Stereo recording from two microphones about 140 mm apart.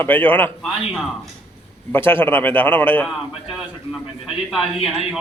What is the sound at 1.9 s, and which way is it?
A man's voice, 15° left (ahead or behind).